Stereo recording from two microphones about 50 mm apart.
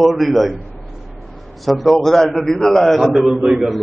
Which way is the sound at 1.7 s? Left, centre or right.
Centre.